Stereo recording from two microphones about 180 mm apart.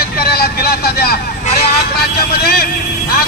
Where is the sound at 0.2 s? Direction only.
60° left (ahead or behind).